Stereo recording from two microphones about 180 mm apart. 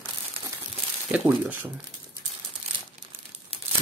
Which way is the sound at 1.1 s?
10° right (ahead or behind).